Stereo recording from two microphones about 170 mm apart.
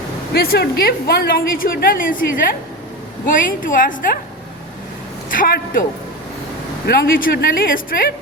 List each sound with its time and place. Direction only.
0.3 s a woman's voice: 70° left (ahead or behind)
5.3 s a woman's voice: 55° left (ahead or behind)
6.8 s a woman's voice: 65° left (ahead or behind)